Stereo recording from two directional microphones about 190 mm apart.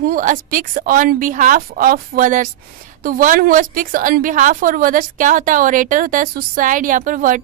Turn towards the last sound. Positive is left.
turn(degrees=-45)  # may be behind; listen again after turning